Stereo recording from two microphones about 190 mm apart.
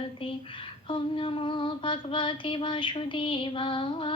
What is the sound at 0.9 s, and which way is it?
Female singing, 25° left (ahead or behind).